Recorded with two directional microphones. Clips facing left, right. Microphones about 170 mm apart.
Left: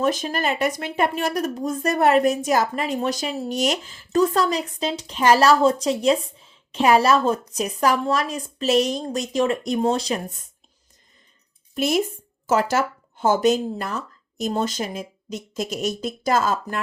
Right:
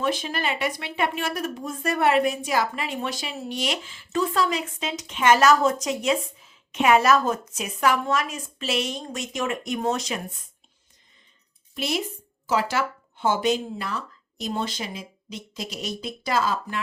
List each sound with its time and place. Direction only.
0.0 s speech: 40° left (ahead or behind)
11.7 s speech: 45° left (ahead or behind)